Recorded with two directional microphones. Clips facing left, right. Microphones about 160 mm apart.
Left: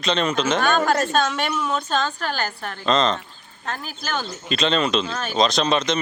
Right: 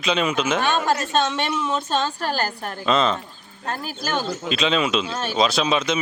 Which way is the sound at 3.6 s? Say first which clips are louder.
Right 2 dB; 35° right (ahead or behind).